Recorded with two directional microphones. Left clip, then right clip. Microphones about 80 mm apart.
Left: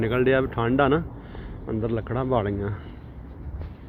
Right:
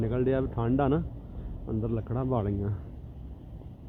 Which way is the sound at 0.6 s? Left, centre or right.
Right.